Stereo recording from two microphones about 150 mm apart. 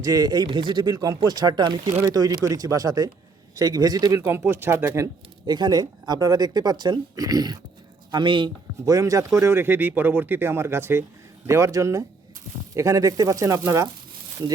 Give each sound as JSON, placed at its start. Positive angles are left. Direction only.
{"t": 0.0, "sound": "speech", "side_deg": -25}
{"t": 5.5, "sound": "speech", "side_deg": -30}
{"t": 8.9, "sound": "speech", "side_deg": -20}